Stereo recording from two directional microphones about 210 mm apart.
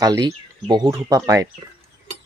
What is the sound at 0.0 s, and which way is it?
Speech, 20° right (ahead or behind).